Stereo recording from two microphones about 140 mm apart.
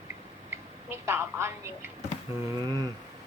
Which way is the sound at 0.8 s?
15° right (ahead or behind).